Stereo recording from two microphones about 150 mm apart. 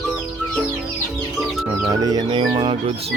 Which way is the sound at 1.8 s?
25° right (ahead or behind).